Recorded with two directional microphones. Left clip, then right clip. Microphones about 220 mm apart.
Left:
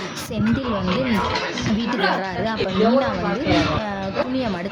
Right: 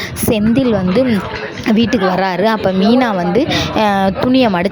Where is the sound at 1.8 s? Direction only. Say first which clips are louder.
Right 8 dB; 35° right (ahead or behind).